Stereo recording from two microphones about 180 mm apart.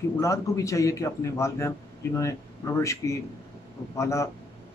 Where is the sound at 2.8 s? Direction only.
15° left (ahead or behind).